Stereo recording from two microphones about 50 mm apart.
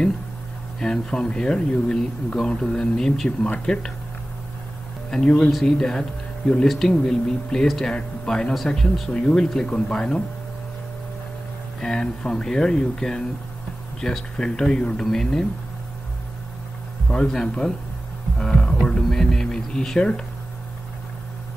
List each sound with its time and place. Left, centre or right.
0.7 s speech: centre
5.1 s speech: centre
5.5 s speech: centre
11.8 s speech: centre
14.3 s speech: centre
15.0 s speech: centre
17.1 s speech: centre
18.7 s music: centre